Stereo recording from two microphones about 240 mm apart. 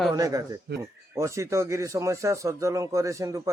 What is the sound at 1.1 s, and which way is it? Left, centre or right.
A man's voice, centre.